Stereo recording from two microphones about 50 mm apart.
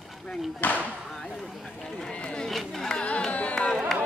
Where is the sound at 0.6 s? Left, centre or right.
Left.